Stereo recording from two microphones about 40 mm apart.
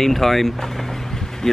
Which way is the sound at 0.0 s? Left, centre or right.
Centre.